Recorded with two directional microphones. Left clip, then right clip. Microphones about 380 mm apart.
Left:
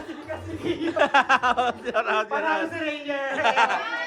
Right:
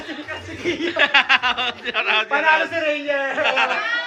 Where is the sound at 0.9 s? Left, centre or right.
Centre.